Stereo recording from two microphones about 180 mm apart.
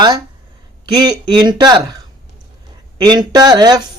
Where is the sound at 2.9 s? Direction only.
25° right (ahead or behind).